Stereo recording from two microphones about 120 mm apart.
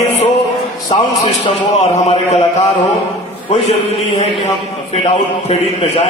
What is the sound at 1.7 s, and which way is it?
Speech, 65° left (ahead or behind).